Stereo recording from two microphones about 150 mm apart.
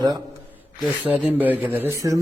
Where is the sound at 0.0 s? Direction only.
25° right (ahead or behind).